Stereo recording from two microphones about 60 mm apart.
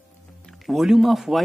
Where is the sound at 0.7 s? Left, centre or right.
Centre.